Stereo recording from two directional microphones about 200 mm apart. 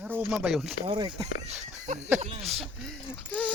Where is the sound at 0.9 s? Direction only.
25° right (ahead or behind).